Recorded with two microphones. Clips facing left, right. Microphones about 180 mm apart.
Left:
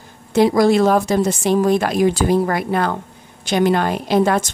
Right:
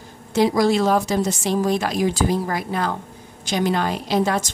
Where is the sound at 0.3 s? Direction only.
55° left (ahead or behind).